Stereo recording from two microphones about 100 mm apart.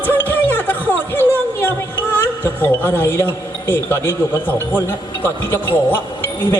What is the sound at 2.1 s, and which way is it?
A woman's voice, 20° left (ahead or behind).